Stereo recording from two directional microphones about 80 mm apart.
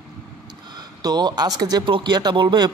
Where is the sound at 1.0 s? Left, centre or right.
Right.